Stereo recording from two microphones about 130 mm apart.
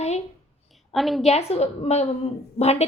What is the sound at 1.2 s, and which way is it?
A woman's voice, 55° left (ahead or behind).